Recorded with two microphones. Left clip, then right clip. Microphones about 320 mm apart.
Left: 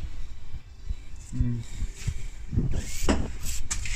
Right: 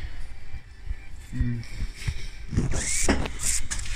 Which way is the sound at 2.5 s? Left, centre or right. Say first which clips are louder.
Right 4 dB; right.